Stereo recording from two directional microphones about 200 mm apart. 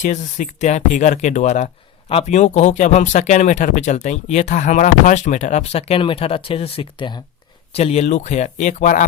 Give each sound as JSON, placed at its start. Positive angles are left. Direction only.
{"t": 0.0, "sound": "speech", "side_deg": 35}